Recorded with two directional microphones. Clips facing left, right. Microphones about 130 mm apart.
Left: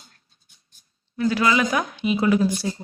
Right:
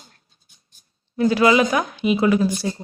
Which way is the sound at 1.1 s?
30° right (ahead or behind).